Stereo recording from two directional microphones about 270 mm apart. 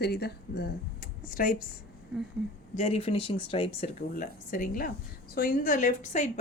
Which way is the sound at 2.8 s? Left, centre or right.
Left.